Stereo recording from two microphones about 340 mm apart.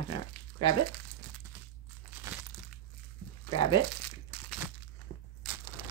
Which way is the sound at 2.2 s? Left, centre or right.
Centre.